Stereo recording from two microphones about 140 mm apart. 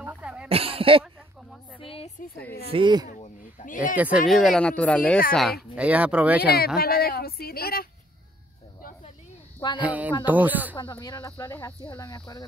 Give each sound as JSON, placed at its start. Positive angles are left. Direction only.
{"t": 0.0, "sound": "throat clearing", "side_deg": -10}
{"t": 0.5, "sound": "speech", "side_deg": -45}
{"t": 1.8, "sound": "a sound", "side_deg": 40}
{"t": 2.7, "sound": "speech", "side_deg": -35}
{"t": 3.1, "sound": "a sound", "side_deg": 60}
{"t": 3.9, "sound": "speech", "side_deg": -10}
{"t": 4.3, "sound": "speech", "side_deg": 0}
{"t": 6.4, "sound": "speech", "side_deg": 90}
{"t": 6.8, "sound": "a sound", "side_deg": 90}
{"t": 9.8, "sound": "speech", "side_deg": -10}
{"t": 10.8, "sound": "speech", "side_deg": 30}
{"t": 12.0, "sound": "speech", "side_deg": 25}